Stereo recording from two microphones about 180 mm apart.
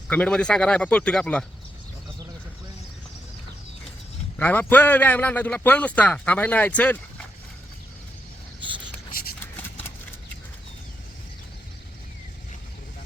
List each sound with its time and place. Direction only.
0.1 s speech: 5° left (ahead or behind)
4.4 s a man's voice: 10° left (ahead or behind)
8.6 s a sound: 25° right (ahead or behind)